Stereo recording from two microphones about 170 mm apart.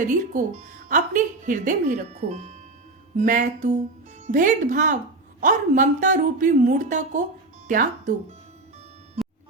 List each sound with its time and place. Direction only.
0.0 s speech: 50° right (ahead or behind)